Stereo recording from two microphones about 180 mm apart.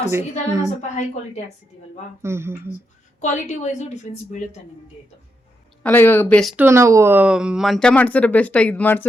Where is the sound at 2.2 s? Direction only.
15° right (ahead or behind).